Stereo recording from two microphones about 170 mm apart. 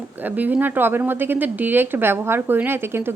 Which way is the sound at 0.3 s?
10° right (ahead or behind).